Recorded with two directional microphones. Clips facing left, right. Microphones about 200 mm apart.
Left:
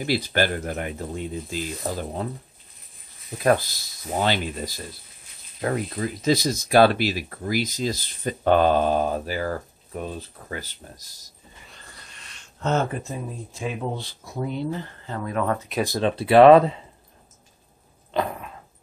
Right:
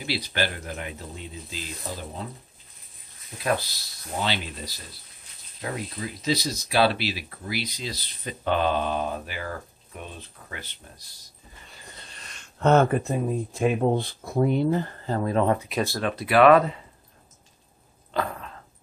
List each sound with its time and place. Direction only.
0.0 s speech: 45° left (ahead or behind)
3.4 s speech: 50° left (ahead or behind)
11.8 s a sound: 25° right (ahead or behind)
12.5 s speech: 60° right (ahead or behind); by 15.4 s 35° right (ahead or behind)
15.4 s speech: 15° right (ahead or behind)
15.8 s speech: 20° left (ahead or behind)
18.1 s dog: 15° left (ahead or behind)